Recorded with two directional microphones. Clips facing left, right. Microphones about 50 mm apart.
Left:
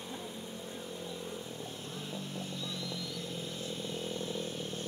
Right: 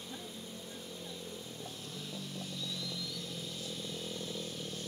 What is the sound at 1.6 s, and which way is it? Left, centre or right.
Vehicle, left.